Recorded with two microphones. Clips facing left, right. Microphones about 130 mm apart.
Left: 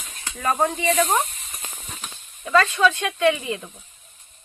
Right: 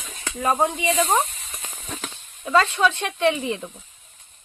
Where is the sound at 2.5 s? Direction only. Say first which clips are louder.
Left 1 dB; 20° right (ahead or behind).